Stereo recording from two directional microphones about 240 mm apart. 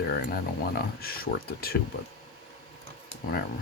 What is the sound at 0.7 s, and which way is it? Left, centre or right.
Speech, left.